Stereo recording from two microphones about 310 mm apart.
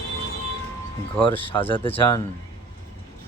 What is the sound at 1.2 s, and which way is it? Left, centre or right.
Speech, centre.